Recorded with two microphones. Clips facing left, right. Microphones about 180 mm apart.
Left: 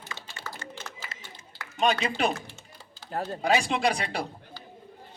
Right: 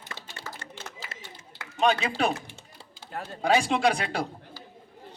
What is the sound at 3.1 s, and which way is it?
Speech, 35° left (ahead or behind).